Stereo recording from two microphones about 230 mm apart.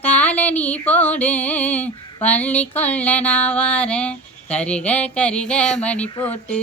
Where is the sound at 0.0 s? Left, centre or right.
Centre.